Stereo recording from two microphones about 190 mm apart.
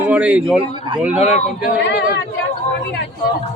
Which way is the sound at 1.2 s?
35° left (ahead or behind).